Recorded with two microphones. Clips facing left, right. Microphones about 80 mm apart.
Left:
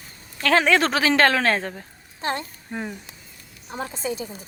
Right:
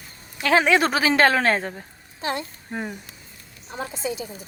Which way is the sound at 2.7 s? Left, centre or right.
Centre.